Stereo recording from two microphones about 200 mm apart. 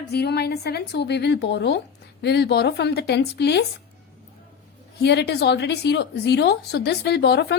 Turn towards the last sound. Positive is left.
turn(degrees=55)  # may be behind; listen again after turning